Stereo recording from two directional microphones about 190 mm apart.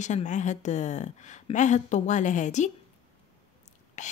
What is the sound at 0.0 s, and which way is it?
A woman's voice, 40° left (ahead or behind).